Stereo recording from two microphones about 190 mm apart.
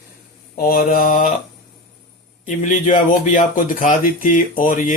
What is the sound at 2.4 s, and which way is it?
Speech, 40° left (ahead or behind).